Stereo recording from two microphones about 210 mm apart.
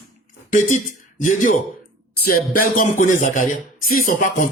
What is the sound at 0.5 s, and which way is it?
Speech, 35° left (ahead or behind).